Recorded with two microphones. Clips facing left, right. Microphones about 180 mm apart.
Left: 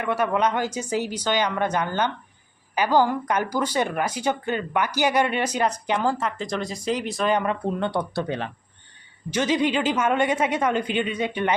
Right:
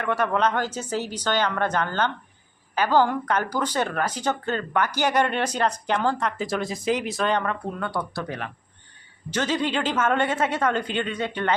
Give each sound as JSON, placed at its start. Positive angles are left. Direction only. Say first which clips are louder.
{"t": 0.0, "sound": "speech", "louder": "left 1 dB", "side_deg": 10}
{"t": 7.8, "sound": "speech", "louder": "left 4 dB", "side_deg": 25}
{"t": 9.3, "sound": "speech", "louder": "left 3 dB", "side_deg": 10}